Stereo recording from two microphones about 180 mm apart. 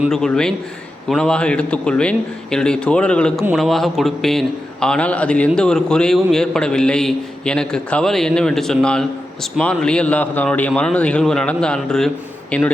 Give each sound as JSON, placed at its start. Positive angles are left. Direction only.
{"t": 0.0, "sound": "a man's voice", "side_deg": 5}